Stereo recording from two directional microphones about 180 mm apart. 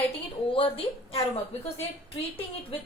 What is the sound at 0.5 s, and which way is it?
Speech, 30° left (ahead or behind).